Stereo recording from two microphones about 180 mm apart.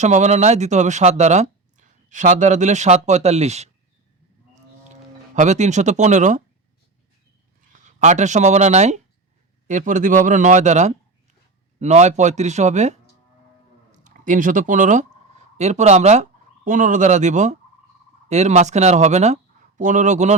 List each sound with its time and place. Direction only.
0.0 s speech: 40° right (ahead or behind)
5.3 s speech: 40° right (ahead or behind)
7.7 s speech: 45° right (ahead or behind)